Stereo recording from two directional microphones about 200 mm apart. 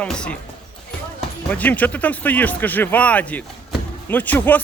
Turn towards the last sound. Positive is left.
turn(degrees=10)  # may be behind; listen again after turning